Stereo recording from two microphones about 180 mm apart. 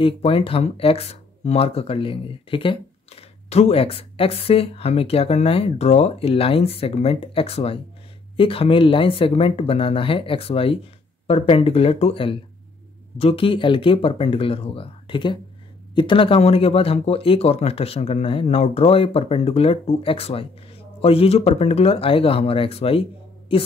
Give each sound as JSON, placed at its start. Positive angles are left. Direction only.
{"t": 0.0, "sound": "speech", "side_deg": 30}